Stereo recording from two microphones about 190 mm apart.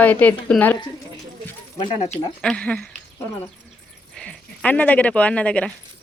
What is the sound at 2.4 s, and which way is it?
Speech, 5° left (ahead or behind).